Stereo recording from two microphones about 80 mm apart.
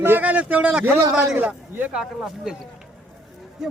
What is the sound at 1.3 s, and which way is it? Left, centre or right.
Speech, right.